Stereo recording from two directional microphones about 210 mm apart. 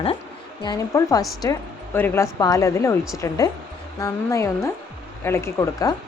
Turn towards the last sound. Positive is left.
turn(degrees=15)  # may be behind; listen again after turning